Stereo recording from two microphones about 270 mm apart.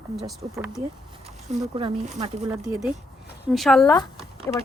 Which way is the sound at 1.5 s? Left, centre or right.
Right.